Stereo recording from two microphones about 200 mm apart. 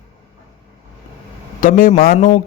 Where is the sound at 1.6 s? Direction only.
40° left (ahead or behind).